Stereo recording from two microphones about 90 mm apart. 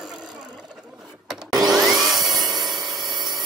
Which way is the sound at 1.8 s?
Centre (ahead or behind).